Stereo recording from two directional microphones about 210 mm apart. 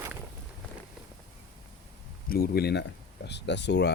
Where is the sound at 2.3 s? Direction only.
45° left (ahead or behind).